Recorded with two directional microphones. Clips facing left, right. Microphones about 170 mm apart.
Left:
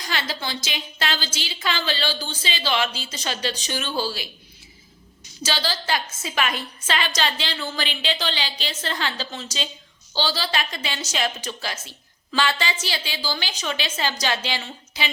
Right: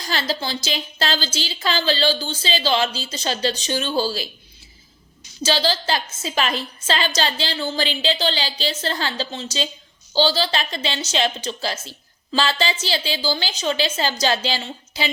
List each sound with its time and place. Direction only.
0.0 s a woman's voice: 35° right (ahead or behind)
5.4 s a woman's voice: 30° right (ahead or behind)